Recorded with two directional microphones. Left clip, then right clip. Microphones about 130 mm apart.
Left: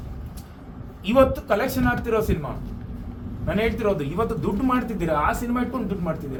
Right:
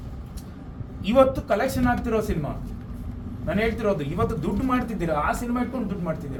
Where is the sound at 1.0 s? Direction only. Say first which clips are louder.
Even; centre (ahead or behind).